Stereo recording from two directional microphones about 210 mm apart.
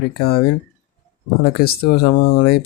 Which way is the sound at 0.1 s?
50° left (ahead or behind).